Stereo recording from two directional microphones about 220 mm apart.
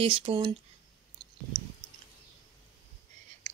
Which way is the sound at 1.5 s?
10° right (ahead or behind).